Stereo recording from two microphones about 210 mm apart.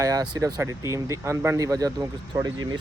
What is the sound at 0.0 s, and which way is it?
Speech, 15° right (ahead or behind).